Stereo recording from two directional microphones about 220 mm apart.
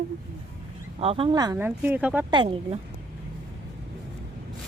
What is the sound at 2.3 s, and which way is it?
Speech, 25° right (ahead or behind).